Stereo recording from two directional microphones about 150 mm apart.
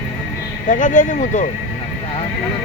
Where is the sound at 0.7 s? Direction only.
60° left (ahead or behind).